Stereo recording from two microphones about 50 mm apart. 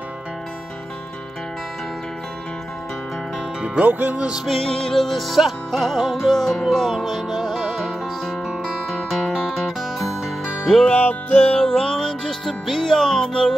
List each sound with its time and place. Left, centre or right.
3.8 s music: right
4.5 s music: centre
8.8 s music: centre
9.3 s music: centre
10.9 s music: left
11.6 s music: centre